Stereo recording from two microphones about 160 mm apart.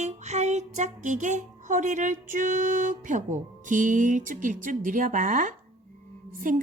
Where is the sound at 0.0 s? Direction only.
45° right (ahead or behind).